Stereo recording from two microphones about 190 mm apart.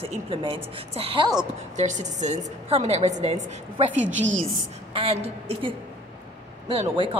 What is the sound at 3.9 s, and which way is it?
Speech, 80° right.